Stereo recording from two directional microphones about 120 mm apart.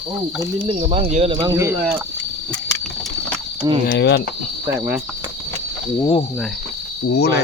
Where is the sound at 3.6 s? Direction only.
30° right (ahead or behind).